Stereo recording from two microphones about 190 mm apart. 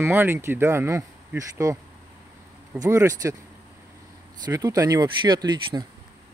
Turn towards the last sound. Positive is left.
turn(degrees=-20)  # may be behind; listen again after turning